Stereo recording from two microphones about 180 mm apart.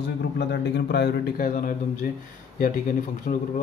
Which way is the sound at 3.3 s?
40° left (ahead or behind).